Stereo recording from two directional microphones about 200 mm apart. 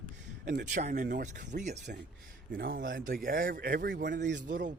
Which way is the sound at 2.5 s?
55° right (ahead or behind).